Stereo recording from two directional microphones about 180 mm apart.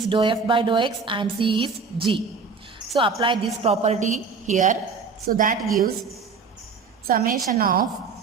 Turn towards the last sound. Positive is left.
turn(degrees=-50)  # may be behind; listen again after turning